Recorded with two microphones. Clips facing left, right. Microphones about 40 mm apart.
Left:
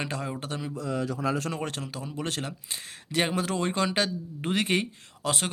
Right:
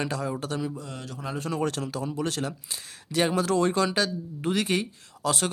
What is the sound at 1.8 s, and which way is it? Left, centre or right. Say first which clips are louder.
Speech: right 5 dB; centre.